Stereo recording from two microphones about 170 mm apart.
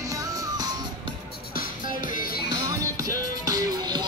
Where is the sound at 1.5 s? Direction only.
55° left (ahead or behind).